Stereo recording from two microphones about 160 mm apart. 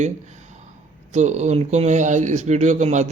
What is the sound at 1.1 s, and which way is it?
Speech, 45° right (ahead or behind).